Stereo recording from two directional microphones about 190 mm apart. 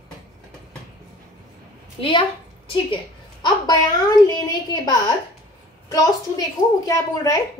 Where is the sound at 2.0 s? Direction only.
30° left (ahead or behind).